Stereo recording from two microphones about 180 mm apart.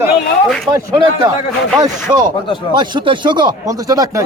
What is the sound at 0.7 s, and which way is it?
Speech, 20° right (ahead or behind).